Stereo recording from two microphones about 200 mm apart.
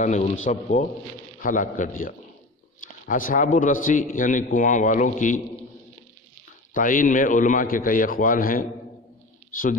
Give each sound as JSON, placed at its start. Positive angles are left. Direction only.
{"t": 0.0, "sound": "a man's voice", "side_deg": 40}
{"t": 6.7, "sound": "a man's voice", "side_deg": 40}